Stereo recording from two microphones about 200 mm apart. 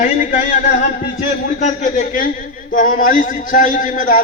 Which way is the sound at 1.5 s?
35° left (ahead or behind).